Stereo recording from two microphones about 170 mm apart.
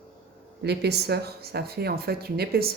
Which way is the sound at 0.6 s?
75° right (ahead or behind).